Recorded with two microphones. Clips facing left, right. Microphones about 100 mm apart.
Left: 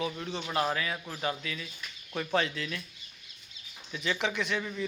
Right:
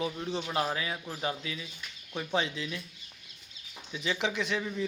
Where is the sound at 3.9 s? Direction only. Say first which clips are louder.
Even; 25° right (ahead or behind).